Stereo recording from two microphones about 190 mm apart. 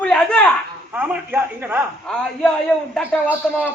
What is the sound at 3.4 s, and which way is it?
Speech, centre (ahead or behind).